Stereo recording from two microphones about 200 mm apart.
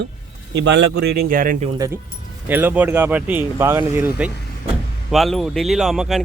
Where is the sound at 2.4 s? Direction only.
10° right (ahead or behind).